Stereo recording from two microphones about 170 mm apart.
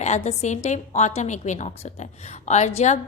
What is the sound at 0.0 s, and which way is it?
A woman's voice, 40° left (ahead or behind).